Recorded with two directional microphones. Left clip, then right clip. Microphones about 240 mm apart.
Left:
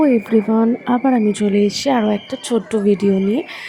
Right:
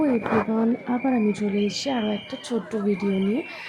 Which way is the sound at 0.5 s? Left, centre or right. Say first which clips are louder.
Left 8 dB; left.